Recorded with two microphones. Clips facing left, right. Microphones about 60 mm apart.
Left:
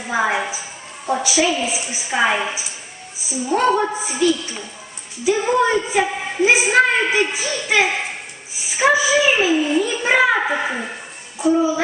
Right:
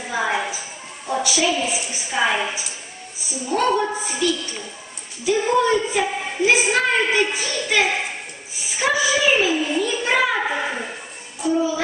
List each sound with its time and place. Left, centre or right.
0.1 s a sound: centre
1.1 s a woman's voice: centre
3.4 s a woman's voice: centre